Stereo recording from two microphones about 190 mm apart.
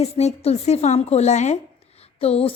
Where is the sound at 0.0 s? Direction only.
35° left (ahead or behind).